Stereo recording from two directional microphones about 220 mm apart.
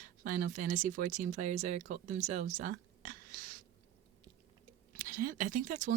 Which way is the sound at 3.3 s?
40° right (ahead or behind).